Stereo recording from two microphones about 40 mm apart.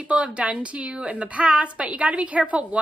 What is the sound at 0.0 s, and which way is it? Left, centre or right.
A woman's voice, right.